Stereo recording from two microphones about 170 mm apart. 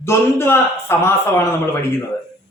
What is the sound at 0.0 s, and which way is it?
A man's voice, 15° left (ahead or behind).